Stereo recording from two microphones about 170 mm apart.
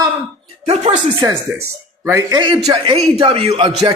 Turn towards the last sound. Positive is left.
turn(degrees=-30)  # may be behind; listen again after turning